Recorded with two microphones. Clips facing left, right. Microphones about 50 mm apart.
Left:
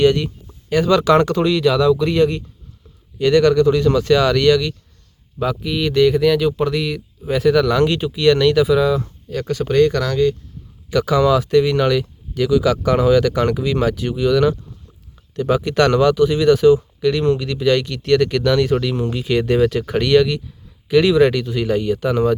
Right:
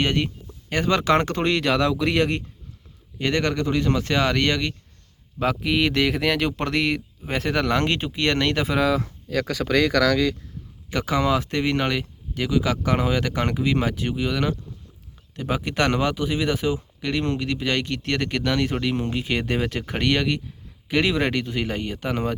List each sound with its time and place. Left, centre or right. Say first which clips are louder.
0.0 s speech: left 8 dB; right
3.2 s speech: left 10 dB; right
5.4 s speech: left 1 dB; right
7.3 s speech: left 8 dB; right
8.8 s speech: left 4 dB; right
9.6 s speech: left 5 dB; right
10.8 s speech: left 7 dB; right